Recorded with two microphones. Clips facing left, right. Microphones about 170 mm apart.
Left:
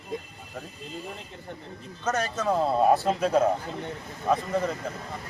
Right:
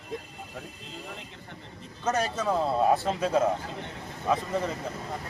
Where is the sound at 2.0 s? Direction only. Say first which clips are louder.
Even; 10° right (ahead or behind).